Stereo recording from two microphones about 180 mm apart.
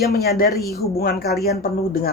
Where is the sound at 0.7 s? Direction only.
60° left (ahead or behind).